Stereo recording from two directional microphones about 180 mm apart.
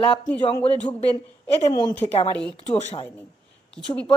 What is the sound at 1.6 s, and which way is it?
Speech, 25° left (ahead or behind).